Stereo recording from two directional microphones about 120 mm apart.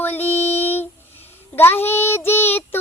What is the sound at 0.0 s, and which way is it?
Music, 15° left (ahead or behind).